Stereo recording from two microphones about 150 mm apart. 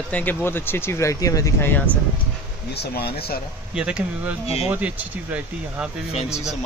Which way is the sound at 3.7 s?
5° right (ahead or behind).